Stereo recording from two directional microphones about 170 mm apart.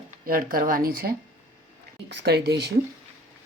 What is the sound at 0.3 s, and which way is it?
Speech, 60° right (ahead or behind).